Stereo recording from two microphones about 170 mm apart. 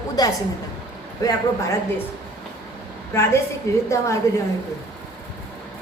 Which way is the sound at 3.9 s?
15° left (ahead or behind).